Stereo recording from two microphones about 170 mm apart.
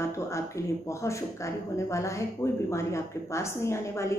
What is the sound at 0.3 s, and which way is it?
Speech, 15° left (ahead or behind).